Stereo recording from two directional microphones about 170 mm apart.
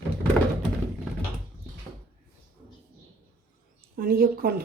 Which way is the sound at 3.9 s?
60° right (ahead or behind).